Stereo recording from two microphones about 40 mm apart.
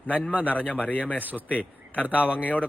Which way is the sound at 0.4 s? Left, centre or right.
Left.